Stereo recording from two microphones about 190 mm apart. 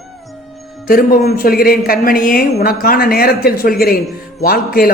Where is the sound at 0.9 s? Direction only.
50° left (ahead or behind).